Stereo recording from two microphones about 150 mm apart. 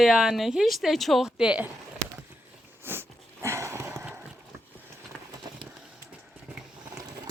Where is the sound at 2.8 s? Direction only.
15° right (ahead or behind).